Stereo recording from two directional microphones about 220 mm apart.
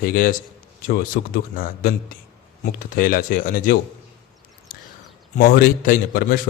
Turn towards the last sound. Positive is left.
turn(degrees=40)  # may be behind; listen again after turning